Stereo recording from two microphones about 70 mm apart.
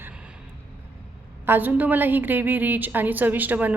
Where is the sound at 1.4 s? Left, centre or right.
Right.